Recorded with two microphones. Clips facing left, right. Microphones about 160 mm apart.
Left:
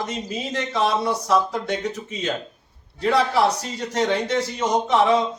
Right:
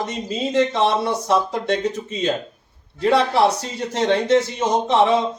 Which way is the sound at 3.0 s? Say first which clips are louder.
Right 3 dB; 25° right (ahead or behind).